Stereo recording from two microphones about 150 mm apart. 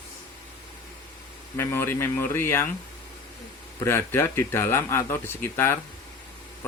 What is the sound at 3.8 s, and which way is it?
Speech, 15° left (ahead or behind).